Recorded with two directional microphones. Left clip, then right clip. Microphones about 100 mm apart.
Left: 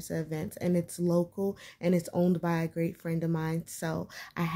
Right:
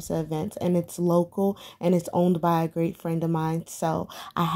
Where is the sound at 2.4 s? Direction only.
25° right (ahead or behind).